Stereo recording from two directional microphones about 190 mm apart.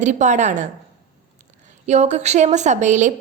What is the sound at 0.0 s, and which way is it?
Speech, 40° right (ahead or behind).